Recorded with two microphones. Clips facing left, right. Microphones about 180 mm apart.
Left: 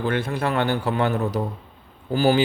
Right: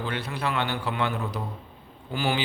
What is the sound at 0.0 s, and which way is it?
A man's voice, 50° left (ahead or behind).